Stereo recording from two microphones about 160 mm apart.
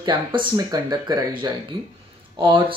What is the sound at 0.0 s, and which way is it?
Speech, 30° right (ahead or behind).